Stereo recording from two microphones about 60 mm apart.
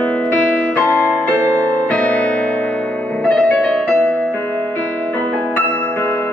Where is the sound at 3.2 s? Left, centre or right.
Centre.